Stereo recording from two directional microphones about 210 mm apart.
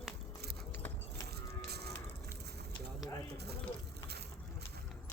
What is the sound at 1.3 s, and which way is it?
Music, 50° right (ahead or behind).